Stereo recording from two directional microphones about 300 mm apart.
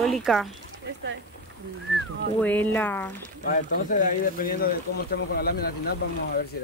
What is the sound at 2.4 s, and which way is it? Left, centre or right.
Speech, centre.